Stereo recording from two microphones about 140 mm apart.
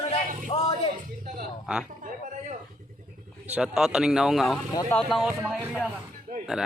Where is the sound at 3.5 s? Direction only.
5° right (ahead or behind).